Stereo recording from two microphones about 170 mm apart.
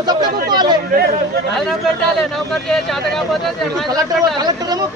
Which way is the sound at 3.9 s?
25° right (ahead or behind).